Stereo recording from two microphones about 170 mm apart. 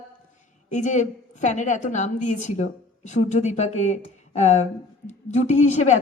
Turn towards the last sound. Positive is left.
turn(degrees=45)  # may be behind; listen again after turning